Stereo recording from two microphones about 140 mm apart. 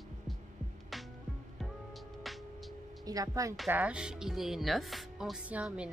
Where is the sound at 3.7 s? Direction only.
10° right (ahead or behind).